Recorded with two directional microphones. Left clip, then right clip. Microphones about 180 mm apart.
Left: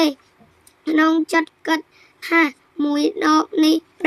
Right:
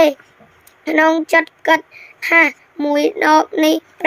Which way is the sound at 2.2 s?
25° left (ahead or behind).